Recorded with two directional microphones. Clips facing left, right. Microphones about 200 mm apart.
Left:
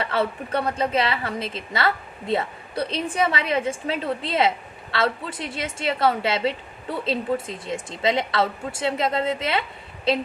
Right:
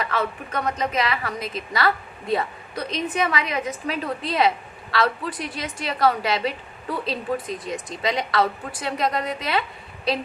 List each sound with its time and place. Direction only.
0.0 s a woman's voice: 30° left (ahead or behind)